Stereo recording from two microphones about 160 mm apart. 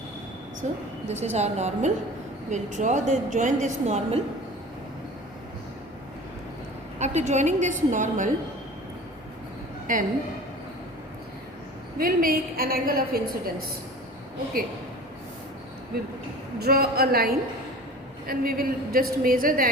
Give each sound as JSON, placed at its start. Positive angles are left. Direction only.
{"t": 0.6, "sound": "a woman's voice", "side_deg": -50}
{"t": 7.0, "sound": "a woman's voice", "side_deg": -45}
{"t": 9.8, "sound": "a woman's voice", "side_deg": -55}
{"t": 11.9, "sound": "a woman's voice", "side_deg": -65}
{"t": 16.6, "sound": "a woman's voice", "side_deg": -75}